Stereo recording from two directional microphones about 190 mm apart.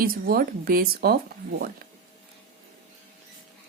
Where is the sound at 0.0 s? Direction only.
50° right (ahead or behind).